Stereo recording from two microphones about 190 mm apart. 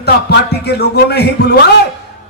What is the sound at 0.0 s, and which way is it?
A man's voice, 60° left (ahead or behind).